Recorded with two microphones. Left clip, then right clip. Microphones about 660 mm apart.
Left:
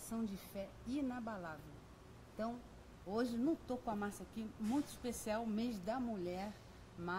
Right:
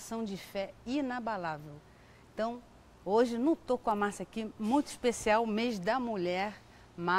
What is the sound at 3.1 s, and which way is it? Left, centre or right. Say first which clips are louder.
A woman's voice: right 11 dB; right.